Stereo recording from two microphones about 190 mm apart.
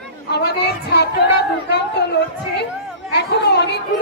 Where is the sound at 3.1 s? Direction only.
60° left (ahead or behind).